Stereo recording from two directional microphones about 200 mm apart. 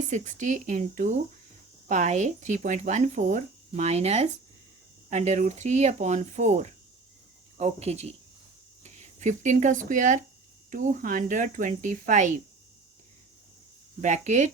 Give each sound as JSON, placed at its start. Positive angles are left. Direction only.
{"t": 0.1, "sound": "speech", "side_deg": -40}
{"t": 14.0, "sound": "speech", "side_deg": -35}